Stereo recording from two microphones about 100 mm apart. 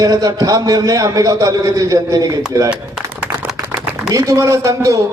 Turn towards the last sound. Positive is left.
turn(degrees=-35)  # may be behind; listen again after turning